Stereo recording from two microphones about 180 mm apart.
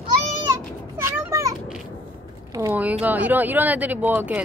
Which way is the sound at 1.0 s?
15° right (ahead or behind).